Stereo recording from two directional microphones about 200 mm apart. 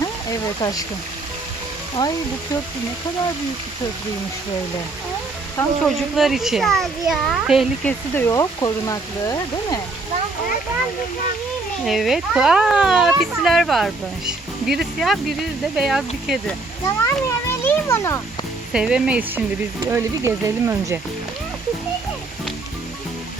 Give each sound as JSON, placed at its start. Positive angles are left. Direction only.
{"t": 0.0, "sound": "a sound", "side_deg": 20}
{"t": 2.0, "sound": "speech", "side_deg": 20}
{"t": 5.8, "sound": "speech", "side_deg": 0}
{"t": 8.1, "sound": "speech", "side_deg": 15}
{"t": 11.9, "sound": "speech", "side_deg": 0}
{"t": 17.0, "sound": "children playing", "side_deg": 15}
{"t": 18.7, "sound": "speech", "side_deg": -5}